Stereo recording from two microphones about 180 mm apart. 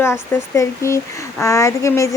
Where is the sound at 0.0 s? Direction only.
15° left (ahead or behind).